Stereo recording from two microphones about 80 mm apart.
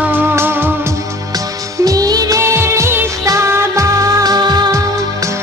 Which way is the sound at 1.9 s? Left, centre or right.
Right.